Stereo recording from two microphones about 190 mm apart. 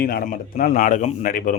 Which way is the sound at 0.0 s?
50° left (ahead or behind).